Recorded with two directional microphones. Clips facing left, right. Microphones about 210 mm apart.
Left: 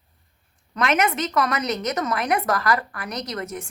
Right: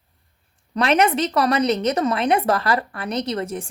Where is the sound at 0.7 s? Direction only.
30° right (ahead or behind).